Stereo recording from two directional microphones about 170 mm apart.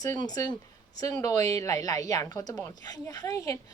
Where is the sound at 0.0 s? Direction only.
20° left (ahead or behind).